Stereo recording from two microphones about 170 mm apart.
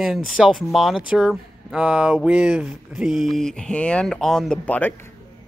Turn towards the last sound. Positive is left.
turn(degrees=10)  # may be behind; listen again after turning